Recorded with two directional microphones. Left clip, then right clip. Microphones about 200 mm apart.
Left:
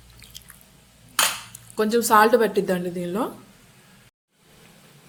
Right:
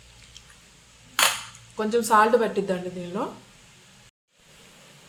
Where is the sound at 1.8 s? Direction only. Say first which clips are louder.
Left 2 dB; 45° left (ahead or behind).